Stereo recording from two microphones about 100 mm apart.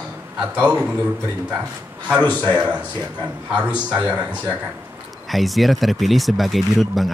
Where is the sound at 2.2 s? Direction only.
15° left (ahead or behind).